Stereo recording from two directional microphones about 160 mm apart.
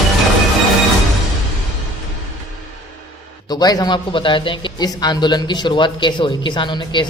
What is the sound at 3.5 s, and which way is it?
Speech, 25° left (ahead or behind).